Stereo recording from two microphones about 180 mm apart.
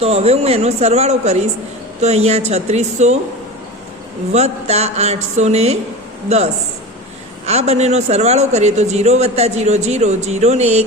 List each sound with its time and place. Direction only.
0.0 s a man's voice: 35° right (ahead or behind)
4.3 s a man's voice: 35° right (ahead or behind)